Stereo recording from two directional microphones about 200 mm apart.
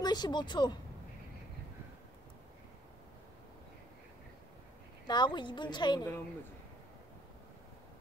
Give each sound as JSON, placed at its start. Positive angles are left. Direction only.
{"t": 0.0, "sound": "a woman's voice", "side_deg": 20}
{"t": 5.0, "sound": "a woman's voice", "side_deg": 20}